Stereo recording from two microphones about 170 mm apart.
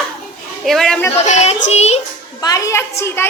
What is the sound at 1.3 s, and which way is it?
Yodeling, 40° left (ahead or behind).